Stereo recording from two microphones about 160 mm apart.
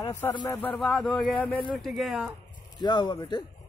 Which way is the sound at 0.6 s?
5° left (ahead or behind).